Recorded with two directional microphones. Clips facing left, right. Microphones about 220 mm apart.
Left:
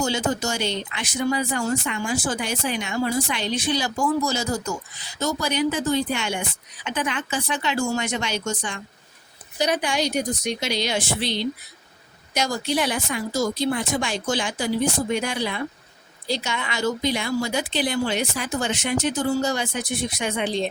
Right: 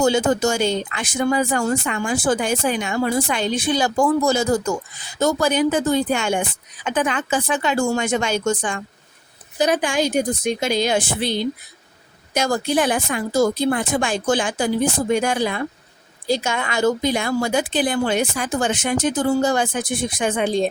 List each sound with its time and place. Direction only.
0.0 s speech: 55° right (ahead or behind)